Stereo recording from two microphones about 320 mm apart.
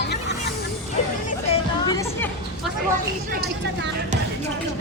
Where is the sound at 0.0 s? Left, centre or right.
Left.